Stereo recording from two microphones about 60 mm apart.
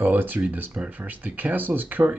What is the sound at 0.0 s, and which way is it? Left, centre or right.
Speech, right.